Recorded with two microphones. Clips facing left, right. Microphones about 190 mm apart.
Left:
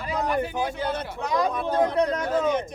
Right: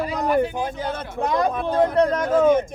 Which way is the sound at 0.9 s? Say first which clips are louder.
Right 3 dB; 50° right (ahead or behind).